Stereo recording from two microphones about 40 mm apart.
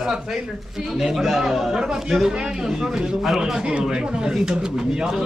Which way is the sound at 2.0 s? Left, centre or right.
Centre.